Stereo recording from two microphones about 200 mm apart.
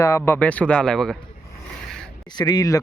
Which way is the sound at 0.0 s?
15° left (ahead or behind).